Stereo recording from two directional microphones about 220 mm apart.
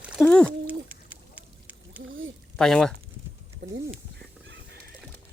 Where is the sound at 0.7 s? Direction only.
5° right (ahead or behind).